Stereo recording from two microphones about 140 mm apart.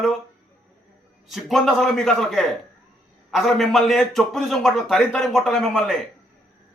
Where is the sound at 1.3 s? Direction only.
Centre (ahead or behind).